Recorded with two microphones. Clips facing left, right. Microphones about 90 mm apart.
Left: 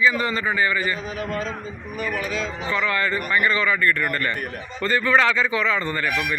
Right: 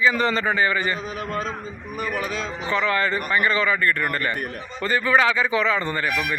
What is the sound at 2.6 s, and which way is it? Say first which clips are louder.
A man's voice: right 2 dB; 25° right (ahead or behind).